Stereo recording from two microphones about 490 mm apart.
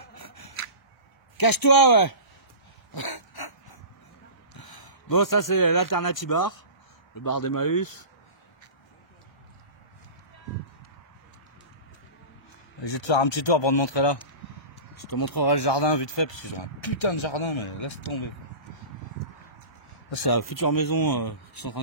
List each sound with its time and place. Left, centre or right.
0.1 s scissors: left
1.4 s speech: left
2.9 s dog: left
4.6 s speech: left
12.8 s speech: left
15.0 s speech: left
20.2 s speech: left